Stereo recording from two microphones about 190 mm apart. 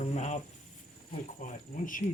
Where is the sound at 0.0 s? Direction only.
40° left (ahead or behind).